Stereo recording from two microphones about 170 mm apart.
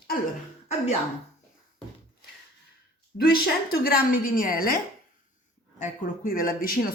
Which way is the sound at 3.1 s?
60° left (ahead or behind).